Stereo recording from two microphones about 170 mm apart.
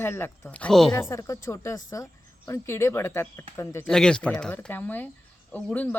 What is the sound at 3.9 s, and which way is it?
Speech, 5° left (ahead or behind).